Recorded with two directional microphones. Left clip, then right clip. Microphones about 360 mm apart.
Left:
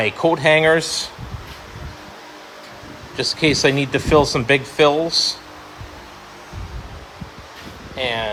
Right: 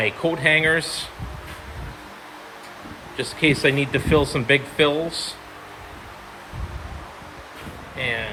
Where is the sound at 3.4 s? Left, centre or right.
Centre.